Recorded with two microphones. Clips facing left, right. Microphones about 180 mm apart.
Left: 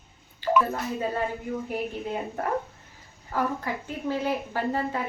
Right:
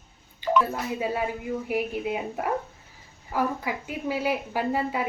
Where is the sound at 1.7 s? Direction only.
10° right (ahead or behind).